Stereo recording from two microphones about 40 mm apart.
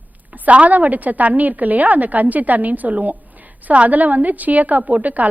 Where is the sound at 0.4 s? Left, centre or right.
Right.